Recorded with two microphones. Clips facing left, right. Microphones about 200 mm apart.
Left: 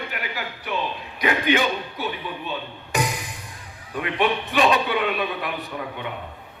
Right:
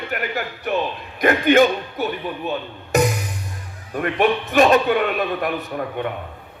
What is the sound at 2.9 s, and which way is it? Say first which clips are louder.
Music: right 7 dB; 45° right (ahead or behind).